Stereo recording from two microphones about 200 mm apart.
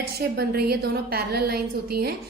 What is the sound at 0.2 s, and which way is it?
A woman's voice, 50° right (ahead or behind).